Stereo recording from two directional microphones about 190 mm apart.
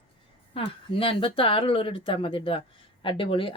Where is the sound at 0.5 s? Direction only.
30° left (ahead or behind).